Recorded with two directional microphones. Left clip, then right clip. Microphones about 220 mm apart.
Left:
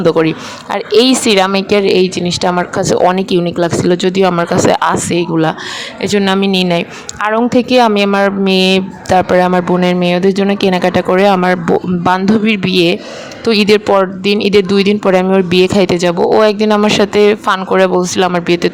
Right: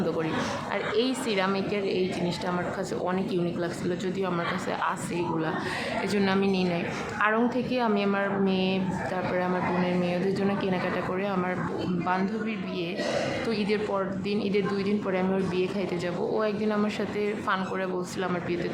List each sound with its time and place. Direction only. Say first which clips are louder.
0.7 s a woman's voice: left 19 dB; 50° left (ahead or behind)